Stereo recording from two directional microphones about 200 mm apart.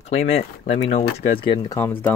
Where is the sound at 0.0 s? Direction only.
35° left (ahead or behind).